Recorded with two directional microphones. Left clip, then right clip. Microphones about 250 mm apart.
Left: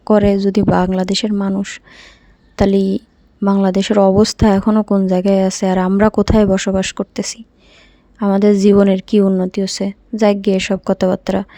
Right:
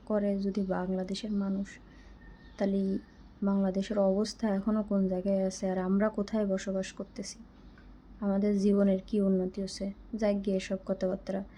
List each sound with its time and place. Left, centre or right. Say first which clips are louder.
0.0 s speech: left 18 dB; left